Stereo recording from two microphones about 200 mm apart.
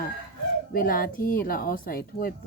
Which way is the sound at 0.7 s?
45° left (ahead or behind).